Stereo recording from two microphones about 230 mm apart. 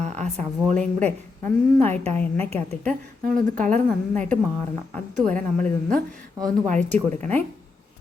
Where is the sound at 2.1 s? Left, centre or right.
Centre.